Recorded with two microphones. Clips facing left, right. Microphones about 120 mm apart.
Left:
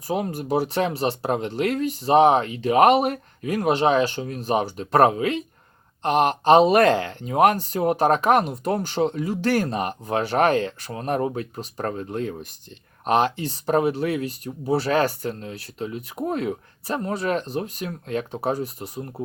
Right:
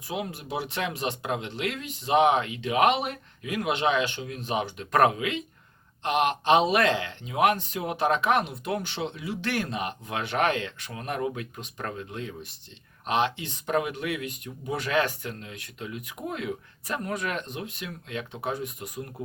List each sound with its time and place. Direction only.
0.1 s speech: 40° left (ahead or behind)